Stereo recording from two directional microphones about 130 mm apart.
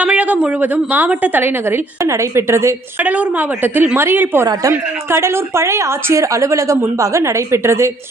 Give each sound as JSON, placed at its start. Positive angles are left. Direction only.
{"t": 0.0, "sound": "a woman's voice", "side_deg": -10}